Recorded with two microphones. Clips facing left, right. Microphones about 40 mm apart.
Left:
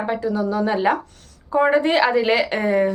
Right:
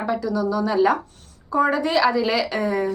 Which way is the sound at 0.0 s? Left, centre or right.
Left.